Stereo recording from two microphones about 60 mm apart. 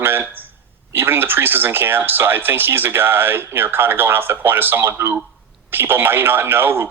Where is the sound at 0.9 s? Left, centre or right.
Right.